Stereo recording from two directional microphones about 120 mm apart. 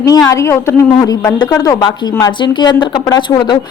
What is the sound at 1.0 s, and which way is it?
Speech, 35° left (ahead or behind).